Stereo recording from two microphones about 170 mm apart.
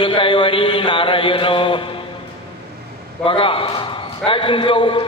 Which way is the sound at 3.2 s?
30° left (ahead or behind).